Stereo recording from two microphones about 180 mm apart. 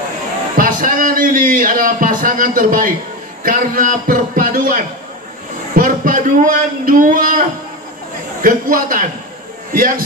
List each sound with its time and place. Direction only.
0.6 s a man's voice: 50° right (ahead or behind)